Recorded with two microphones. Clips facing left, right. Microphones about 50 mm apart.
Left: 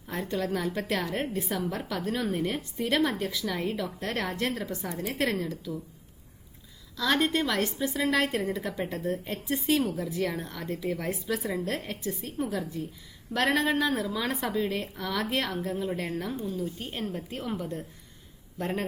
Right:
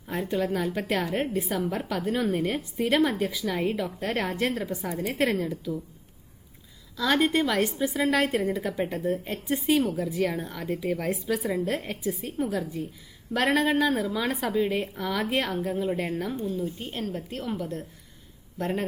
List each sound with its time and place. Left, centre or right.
0.1 s a woman's voice: centre
6.9 s a woman's voice: centre
12.5 s a woman's voice: centre
16.6 s a woman's voice: centre
16.9 s a woman's voice: centre